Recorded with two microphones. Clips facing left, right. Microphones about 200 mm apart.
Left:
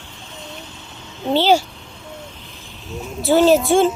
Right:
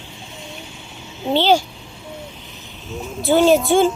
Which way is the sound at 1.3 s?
10° left (ahead or behind).